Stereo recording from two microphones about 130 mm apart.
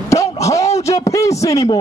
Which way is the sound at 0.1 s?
25° left (ahead or behind).